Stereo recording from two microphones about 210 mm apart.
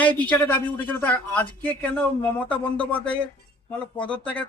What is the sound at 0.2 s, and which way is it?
Speech, 5° left (ahead or behind).